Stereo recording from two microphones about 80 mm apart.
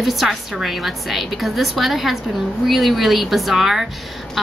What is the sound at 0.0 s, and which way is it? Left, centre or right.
A woman's voice, centre.